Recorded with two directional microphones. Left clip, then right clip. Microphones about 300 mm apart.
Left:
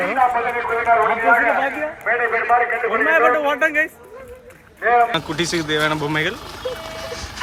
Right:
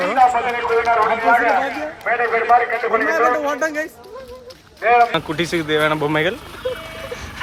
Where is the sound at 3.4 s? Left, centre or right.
Centre.